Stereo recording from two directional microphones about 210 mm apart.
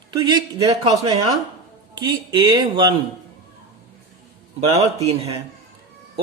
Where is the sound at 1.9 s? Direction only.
20° right (ahead or behind).